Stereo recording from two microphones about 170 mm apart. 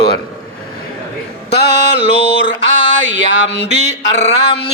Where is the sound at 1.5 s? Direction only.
85° left.